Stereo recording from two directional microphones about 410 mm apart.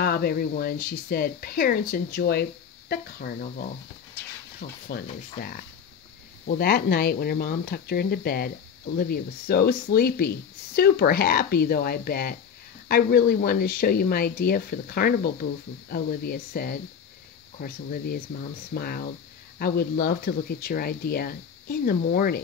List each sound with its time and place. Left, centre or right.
0.0 s speech: left